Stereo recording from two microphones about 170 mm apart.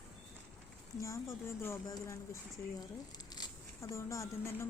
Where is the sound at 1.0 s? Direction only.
15° left (ahead or behind).